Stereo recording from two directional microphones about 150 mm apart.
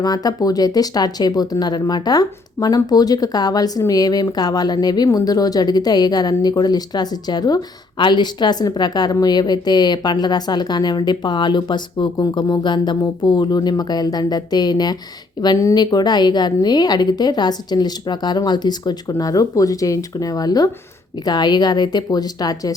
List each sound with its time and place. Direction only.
0.0 s speech: 25° left (ahead or behind)